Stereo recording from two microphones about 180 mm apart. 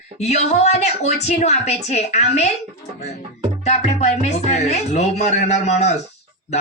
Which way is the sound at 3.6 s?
35° left (ahead or behind).